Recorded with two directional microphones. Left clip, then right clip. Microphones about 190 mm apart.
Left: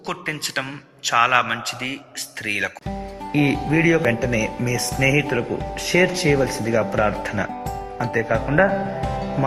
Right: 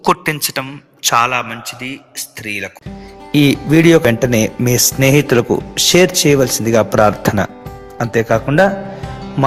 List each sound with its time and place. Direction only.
0.0 s a man's voice: 50° right (ahead or behind)
1.3 s a man's voice: centre (ahead or behind)
3.3 s speech: 35° right (ahead or behind)
9.0 s music: centre (ahead or behind)